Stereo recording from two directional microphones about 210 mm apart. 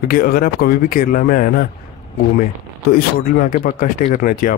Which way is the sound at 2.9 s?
40° left (ahead or behind).